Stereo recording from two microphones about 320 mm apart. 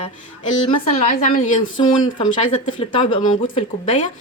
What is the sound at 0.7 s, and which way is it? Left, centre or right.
A woman's voice, left.